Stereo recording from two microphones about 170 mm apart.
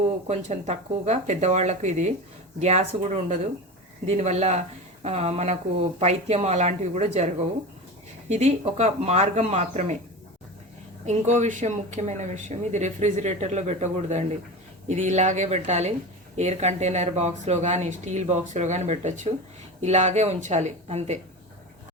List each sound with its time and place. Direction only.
0.3 s speech: 40° right (ahead or behind)
8.3 s speech: 40° right (ahead or behind)
11.0 s speech: 45° right (ahead or behind)